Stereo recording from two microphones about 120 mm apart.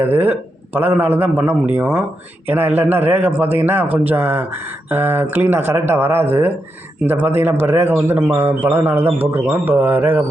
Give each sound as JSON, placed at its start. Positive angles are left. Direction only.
{"t": 0.0, "sound": "a man's voice", "side_deg": -15}